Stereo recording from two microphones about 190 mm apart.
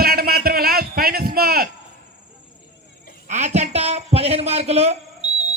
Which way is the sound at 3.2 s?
40° right (ahead or behind).